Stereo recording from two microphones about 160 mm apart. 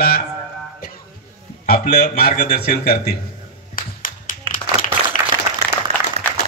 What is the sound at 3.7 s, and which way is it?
Clapping, 60° left (ahead or behind).